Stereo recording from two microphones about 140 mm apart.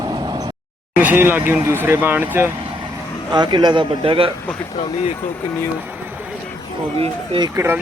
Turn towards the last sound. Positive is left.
turn(degrees=-15)  # may be behind; listen again after turning